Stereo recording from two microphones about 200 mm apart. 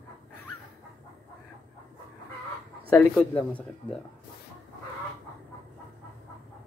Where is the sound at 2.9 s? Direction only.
5° left (ahead or behind).